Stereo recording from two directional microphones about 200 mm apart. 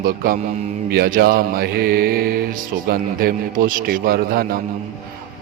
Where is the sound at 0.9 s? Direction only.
50° right (ahead or behind).